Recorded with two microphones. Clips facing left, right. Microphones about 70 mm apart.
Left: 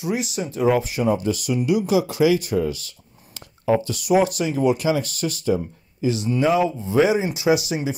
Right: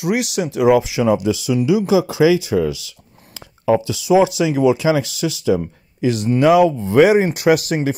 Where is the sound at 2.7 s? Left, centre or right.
Right.